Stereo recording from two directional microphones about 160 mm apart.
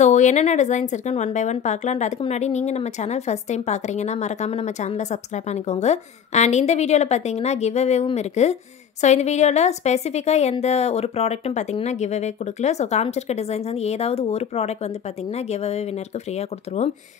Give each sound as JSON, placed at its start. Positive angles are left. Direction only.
{"t": 0.0, "sound": "speech", "side_deg": 45}